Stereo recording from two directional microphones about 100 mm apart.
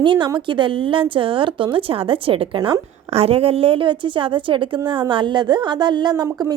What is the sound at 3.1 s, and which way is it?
A woman's voice, 90° right.